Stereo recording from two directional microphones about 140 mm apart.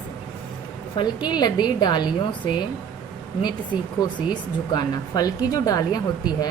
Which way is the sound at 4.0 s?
30° left (ahead or behind).